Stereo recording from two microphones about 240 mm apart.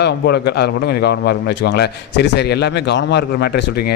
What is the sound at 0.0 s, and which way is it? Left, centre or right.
A man's voice, left.